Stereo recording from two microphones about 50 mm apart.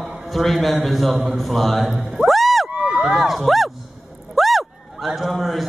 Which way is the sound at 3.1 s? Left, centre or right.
Centre.